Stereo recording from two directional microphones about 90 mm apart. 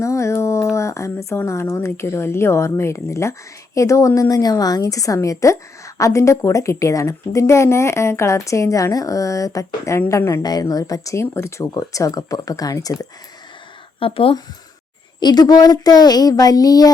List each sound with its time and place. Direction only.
0.0 s a sound: 35° left (ahead or behind)
1.5 s a woman's voice: 35° left (ahead or behind)
10.4 s a woman's voice: 45° left (ahead or behind)
14.0 s speech: 90° left
15.2 s speech: 50° left (ahead or behind)